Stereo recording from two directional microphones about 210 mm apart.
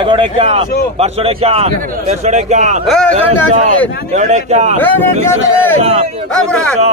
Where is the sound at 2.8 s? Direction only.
Centre (ahead or behind).